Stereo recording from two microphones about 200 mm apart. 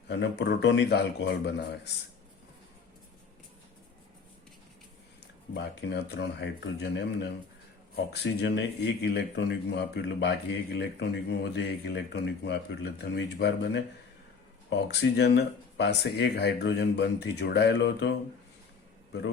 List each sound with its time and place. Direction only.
0.1 s speech: 60° left (ahead or behind)
5.5 s speech: 55° left (ahead or behind)